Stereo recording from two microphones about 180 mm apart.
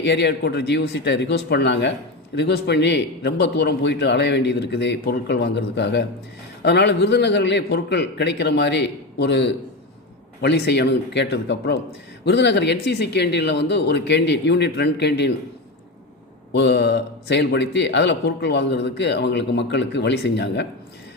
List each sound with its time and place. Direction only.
0.0 s a man's voice: 75° left (ahead or behind)
16.5 s a man's voice: 75° left (ahead or behind)